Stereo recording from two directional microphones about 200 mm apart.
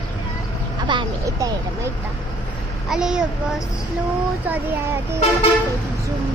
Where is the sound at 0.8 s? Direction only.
20° right (ahead or behind).